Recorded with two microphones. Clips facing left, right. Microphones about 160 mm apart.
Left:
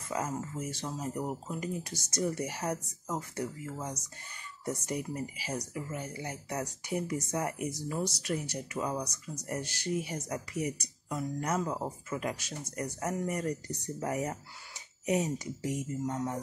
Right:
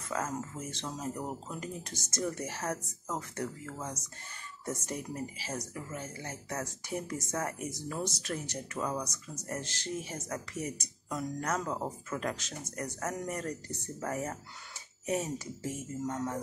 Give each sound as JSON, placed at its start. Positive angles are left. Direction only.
{"t": 0.1, "sound": "speech", "side_deg": 10}